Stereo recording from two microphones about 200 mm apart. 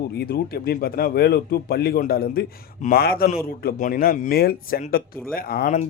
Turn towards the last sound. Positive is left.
turn(degrees=45)  # may be behind; listen again after turning